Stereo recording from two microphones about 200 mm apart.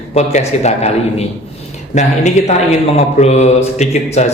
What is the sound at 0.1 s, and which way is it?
Speech, 35° left (ahead or behind).